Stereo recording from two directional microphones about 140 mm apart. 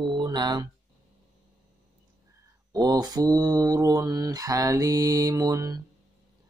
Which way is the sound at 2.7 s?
30° right (ahead or behind).